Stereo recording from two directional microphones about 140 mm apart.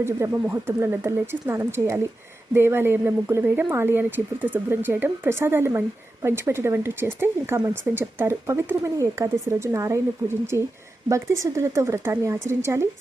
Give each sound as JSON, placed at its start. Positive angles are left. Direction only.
{"t": 0.5, "sound": "speech", "side_deg": -15}